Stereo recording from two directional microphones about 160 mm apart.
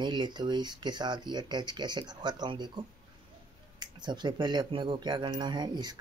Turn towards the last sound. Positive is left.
turn(degrees=-25)  # may be behind; listen again after turning